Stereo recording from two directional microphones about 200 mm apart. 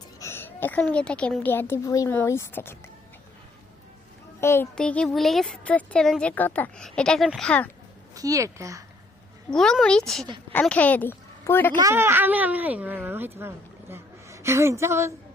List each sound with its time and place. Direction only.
0.2 s a woman's voice: 10° left (ahead or behind)
4.4 s speech: 10° left (ahead or behind)
8.1 s speech: 15° right (ahead or behind)
9.5 s speech: 5° left (ahead or behind)
11.8 s speech: 15° right (ahead or behind)